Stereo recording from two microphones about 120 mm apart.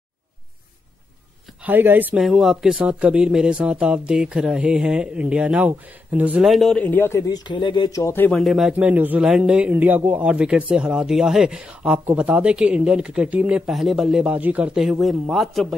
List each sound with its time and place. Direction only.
1.6 s speech: 15° right (ahead or behind)
2.1 s speech: centre (ahead or behind)
6.4 s speech: centre (ahead or behind)
6.8 s speech: 15° left (ahead or behind); by 7.9 s 40° left (ahead or behind)
7.9 s speech: 20° left (ahead or behind)
8.3 s speech: centre (ahead or behind)
8.7 s speech: 15° right (ahead or behind)